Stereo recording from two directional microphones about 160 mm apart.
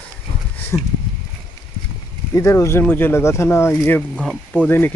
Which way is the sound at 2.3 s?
20° left (ahead or behind).